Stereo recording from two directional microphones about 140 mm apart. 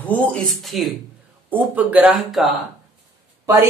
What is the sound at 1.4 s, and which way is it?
Speech, 10° right (ahead or behind).